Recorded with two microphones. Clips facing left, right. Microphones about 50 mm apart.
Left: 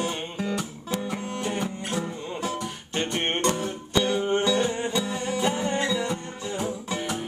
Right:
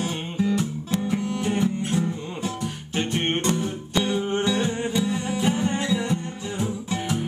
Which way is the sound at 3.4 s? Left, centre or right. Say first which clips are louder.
Right 1 dB; centre.